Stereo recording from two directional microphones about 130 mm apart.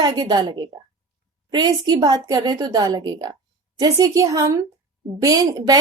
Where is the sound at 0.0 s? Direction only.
35° right (ahead or behind).